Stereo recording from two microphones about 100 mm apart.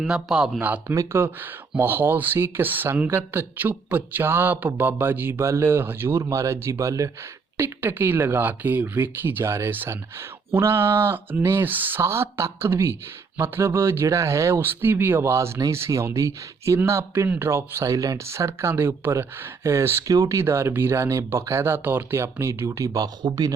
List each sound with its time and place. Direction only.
0.0 s speech: 5° right (ahead or behind)
0.6 s speech: 15° right (ahead or behind); by 7.1 s 30° right (ahead or behind)
7.5 s speech: 20° right (ahead or behind)